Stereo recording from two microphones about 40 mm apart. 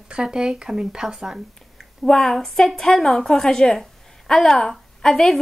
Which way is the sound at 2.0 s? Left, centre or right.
Centre.